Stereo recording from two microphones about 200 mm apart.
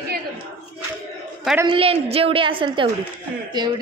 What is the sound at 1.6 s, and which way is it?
A woman's voice, 25° right (ahead or behind).